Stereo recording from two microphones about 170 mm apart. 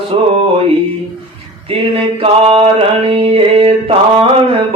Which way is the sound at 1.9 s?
35° right (ahead or behind).